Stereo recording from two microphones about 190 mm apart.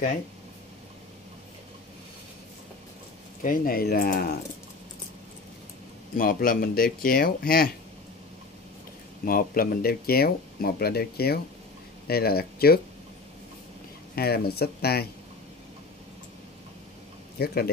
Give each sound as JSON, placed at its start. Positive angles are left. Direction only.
{"t": 3.4, "sound": "speech", "side_deg": 50}
{"t": 6.1, "sound": "speech", "side_deg": 50}
{"t": 9.2, "sound": "speech", "side_deg": 50}
{"t": 14.1, "sound": "speech", "side_deg": 55}
{"t": 17.4, "sound": "speech", "side_deg": 55}